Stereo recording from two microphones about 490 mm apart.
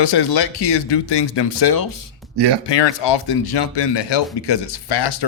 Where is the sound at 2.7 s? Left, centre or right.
Left.